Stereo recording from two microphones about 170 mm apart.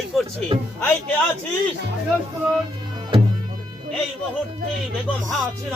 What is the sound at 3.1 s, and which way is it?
Music, 30° right (ahead or behind).